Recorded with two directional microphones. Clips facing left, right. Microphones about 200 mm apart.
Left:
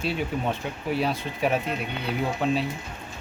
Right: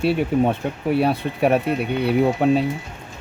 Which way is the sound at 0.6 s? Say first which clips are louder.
Right 7 dB; 50° right (ahead or behind).